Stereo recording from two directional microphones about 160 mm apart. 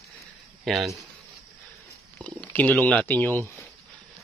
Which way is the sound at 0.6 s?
Centre (ahead or behind).